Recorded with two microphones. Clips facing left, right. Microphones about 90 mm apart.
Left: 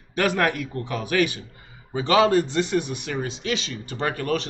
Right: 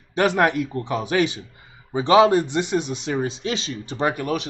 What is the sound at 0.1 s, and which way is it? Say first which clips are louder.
Speech: right 3 dB; 20° right (ahead or behind).